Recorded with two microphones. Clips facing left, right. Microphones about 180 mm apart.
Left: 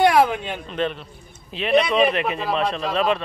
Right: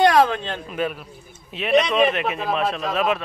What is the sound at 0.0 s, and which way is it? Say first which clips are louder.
Speech: even; 10° left (ahead or behind).